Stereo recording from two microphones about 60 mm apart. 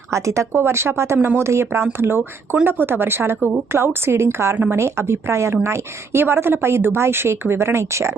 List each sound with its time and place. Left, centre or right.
0.1 s a woman's voice: right
4.5 s speech: right
4.8 s a woman's voice: right